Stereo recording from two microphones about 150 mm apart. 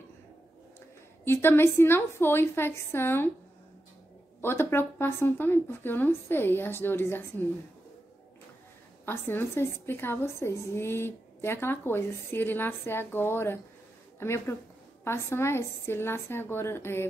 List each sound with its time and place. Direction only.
1.2 s a woman's voice: 15° left (ahead or behind)
4.4 s a woman's voice: 15° left (ahead or behind)
9.0 s a woman's voice: 15° left (ahead or behind)